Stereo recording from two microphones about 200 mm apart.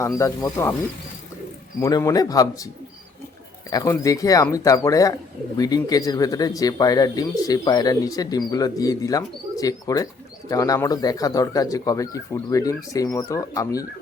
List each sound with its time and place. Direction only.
0.0 s speech: 15° left (ahead or behind)
1.8 s speech: 15° left (ahead or behind)
3.7 s speech: 15° left (ahead or behind)